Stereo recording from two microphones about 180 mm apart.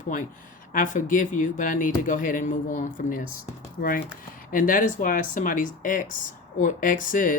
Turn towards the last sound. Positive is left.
turn(degrees=50)  # may be behind; listen again after turning